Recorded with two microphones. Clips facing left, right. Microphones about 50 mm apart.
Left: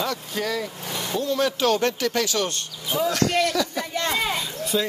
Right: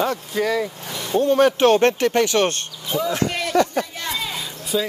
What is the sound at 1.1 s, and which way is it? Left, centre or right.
Speech, right.